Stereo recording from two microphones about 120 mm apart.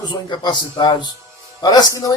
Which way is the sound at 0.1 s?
40° left (ahead or behind).